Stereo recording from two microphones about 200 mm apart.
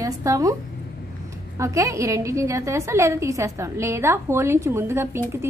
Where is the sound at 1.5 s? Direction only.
15° right (ahead or behind).